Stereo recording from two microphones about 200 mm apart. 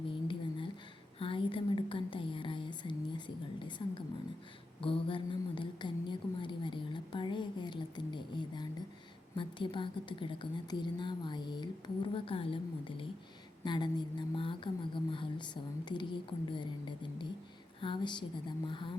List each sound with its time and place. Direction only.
1.2 s whispering: 25° left (ahead or behind)
4.8 s a sound: 25° left (ahead or behind)
9.3 s a woman's voice: 25° left (ahead or behind)